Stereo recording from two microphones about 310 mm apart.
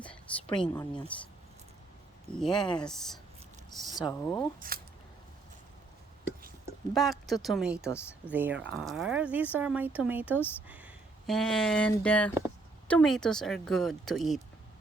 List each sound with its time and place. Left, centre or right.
0.6 s speech: centre
2.3 s speech: centre
4.6 s speech: right
6.9 s speech: centre